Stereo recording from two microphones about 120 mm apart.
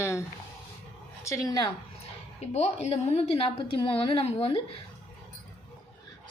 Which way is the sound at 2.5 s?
65° left (ahead or behind).